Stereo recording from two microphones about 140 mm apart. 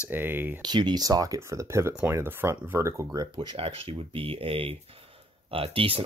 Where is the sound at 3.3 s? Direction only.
40° right (ahead or behind).